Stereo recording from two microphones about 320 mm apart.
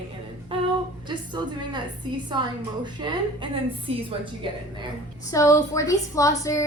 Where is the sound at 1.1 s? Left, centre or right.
Centre.